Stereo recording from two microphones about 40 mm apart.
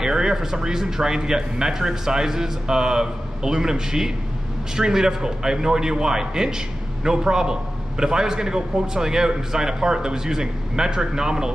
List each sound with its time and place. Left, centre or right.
0.0 s speech: centre